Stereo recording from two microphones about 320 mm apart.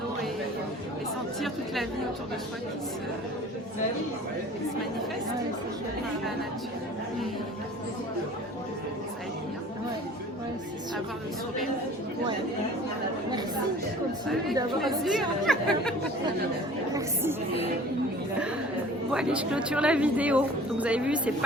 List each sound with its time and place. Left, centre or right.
1.4 s speech: centre
14.8 s speech: centre
19.1 s speech: centre